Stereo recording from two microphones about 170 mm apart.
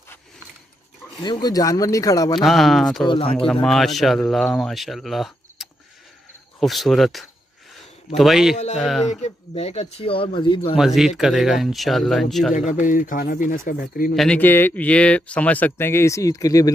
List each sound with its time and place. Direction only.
1.1 s a man's voice: 25° left (ahead or behind)
2.4 s speech: centre (ahead or behind)
3.1 s speech: 30° left (ahead or behind)
3.6 s speech: centre (ahead or behind)
8.5 s speech: 45° left (ahead or behind)
11.1 s speech: centre (ahead or behind)
12.5 s speech: 50° left (ahead or behind)
14.1 s speech: 5° left (ahead or behind); by 16.7 s 20° left (ahead or behind)